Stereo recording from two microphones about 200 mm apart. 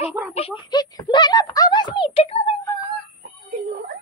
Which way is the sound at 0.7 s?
20° left (ahead or behind).